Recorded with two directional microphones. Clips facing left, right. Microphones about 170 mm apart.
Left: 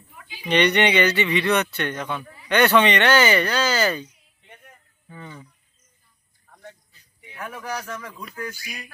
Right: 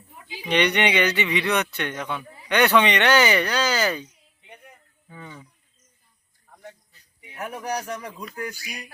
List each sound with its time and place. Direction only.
0.1 s a sound: 25° right (ahead or behind)
0.4 s speech: 10° right (ahead or behind)
4.4 s a sound: 15° right (ahead or behind)
5.0 s speech: 10° right (ahead or behind)
7.3 s speech: 35° right (ahead or behind)
7.9 s speech: 20° right (ahead or behind)